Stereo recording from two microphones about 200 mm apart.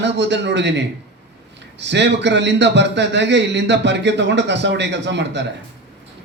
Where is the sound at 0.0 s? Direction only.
60° right (ahead or behind).